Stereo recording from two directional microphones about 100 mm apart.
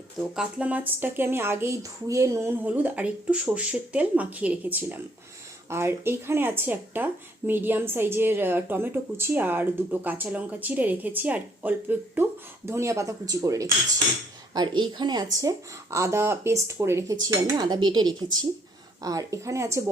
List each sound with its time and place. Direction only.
0.3 s speech: 15° right (ahead or behind)
2.6 s speech: 15° right (ahead or behind); by 13.7 s 35° right (ahead or behind)
14.5 s speech: 50° right (ahead or behind); by 17.2 s 25° right (ahead or behind)
17.2 s speech: 40° right (ahead or behind)